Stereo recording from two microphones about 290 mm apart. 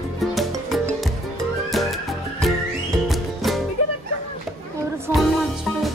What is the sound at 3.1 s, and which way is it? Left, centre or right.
Music, centre.